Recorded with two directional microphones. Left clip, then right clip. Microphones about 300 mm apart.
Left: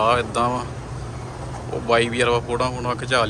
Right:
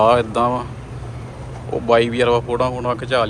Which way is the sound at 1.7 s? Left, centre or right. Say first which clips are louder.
Right 4 dB; centre.